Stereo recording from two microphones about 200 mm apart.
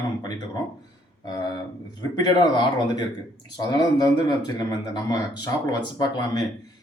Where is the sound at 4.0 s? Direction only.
20° left (ahead or behind).